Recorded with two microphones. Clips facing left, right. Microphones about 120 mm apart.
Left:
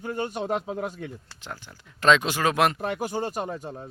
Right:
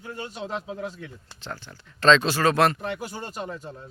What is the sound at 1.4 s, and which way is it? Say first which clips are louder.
Speech: right 4 dB; 10° left (ahead or behind).